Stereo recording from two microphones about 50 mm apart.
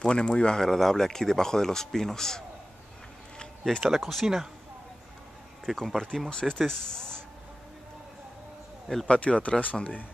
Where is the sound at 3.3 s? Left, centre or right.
Centre.